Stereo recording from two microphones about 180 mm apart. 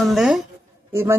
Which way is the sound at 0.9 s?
15° right (ahead or behind).